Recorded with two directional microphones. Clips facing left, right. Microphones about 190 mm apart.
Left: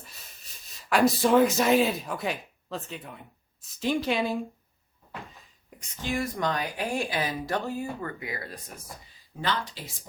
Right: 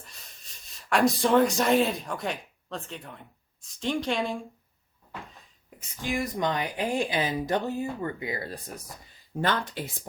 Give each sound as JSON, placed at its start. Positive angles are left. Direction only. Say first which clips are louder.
{"t": 0.8, "sound": "speech", "louder": "left 1 dB", "side_deg": 0}
{"t": 5.9, "sound": "speech", "louder": "even", "side_deg": -15}
{"t": 9.4, "sound": "speech", "louder": "right 3 dB", "side_deg": -50}